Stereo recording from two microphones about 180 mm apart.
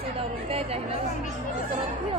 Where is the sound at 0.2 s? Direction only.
30° right (ahead or behind).